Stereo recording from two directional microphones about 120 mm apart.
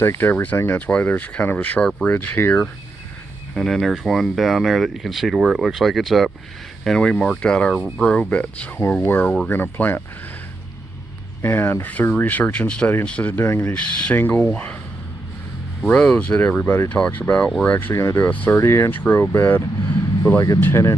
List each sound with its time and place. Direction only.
0.0 s speech: 20° left (ahead or behind)
11.4 s speech: 15° left (ahead or behind)
13.7 s speech: 10° left (ahead or behind)
15.9 s speech: 10° left (ahead or behind)